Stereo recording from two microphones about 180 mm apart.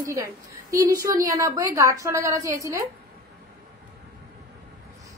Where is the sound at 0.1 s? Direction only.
15° right (ahead or behind).